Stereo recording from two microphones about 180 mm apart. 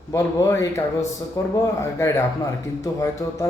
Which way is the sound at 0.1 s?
15° left (ahead or behind).